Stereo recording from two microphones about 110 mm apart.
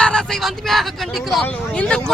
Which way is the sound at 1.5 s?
10° left (ahead or behind).